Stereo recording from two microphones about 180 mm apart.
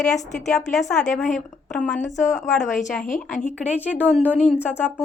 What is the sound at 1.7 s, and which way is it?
Speech, 5° left (ahead or behind).